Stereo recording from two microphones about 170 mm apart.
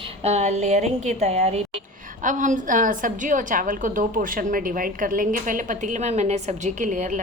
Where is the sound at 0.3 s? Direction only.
40° right (ahead or behind).